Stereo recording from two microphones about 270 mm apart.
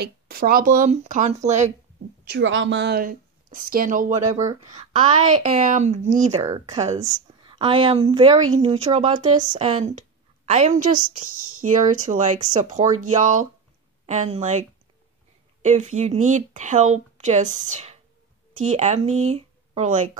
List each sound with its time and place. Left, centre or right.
0.0 s speech: right
2.2 s a woman's voice: right
4.4 s a woman's voice: centre
5.3 s speech: right
6.4 s a woman's voice: centre
15.6 s speech: right